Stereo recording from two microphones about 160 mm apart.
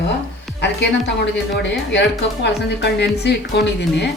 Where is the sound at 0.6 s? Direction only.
90° left.